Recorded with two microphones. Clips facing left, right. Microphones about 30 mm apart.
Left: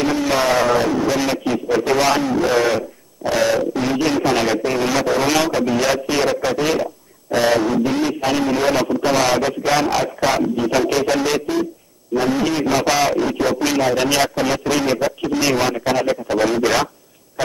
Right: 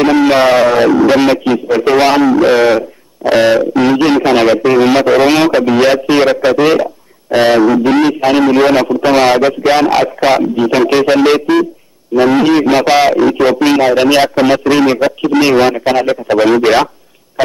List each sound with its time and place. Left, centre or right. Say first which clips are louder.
0.0 s a man's voice: right 10 dB; right
0.3 s a man's voice: right 8 dB; right
1.0 s a man's voice: right 10 dB; right
7.6 s a man's voice: right 9 dB; right
12.1 s a man's voice: right 9 dB; right
12.4 s a man's voice: right 9 dB; right
13.2 s a man's voice: right 9 dB; right
14.3 s a man's voice: right 9 dB; right